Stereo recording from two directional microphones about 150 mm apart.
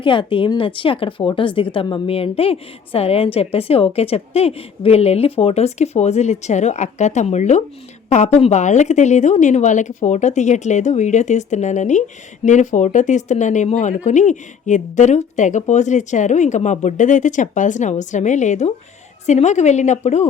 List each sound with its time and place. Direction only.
0.0 s a woman's voice: 35° left (ahead or behind); by 20.2 s 50° left (ahead or behind)